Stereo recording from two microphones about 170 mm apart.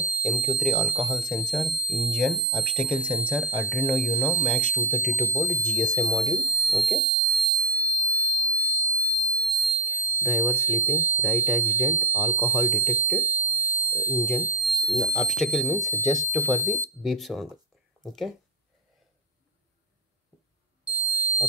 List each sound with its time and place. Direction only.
0.2 s speech: centre (ahead or behind)
4.0 s speech: 10° right (ahead or behind)
4.5 s speech: 10° left (ahead or behind)
8.4 s fire alarm: 10° left (ahead or behind)
9.1 s alarm: 5° left (ahead or behind)
10.9 s speech: 15° left (ahead or behind)
14.4 s speech: centre (ahead or behind)
20.8 s music: 10° right (ahead or behind)